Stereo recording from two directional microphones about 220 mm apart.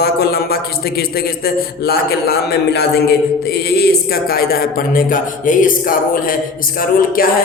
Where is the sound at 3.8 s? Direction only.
45° left (ahead or behind).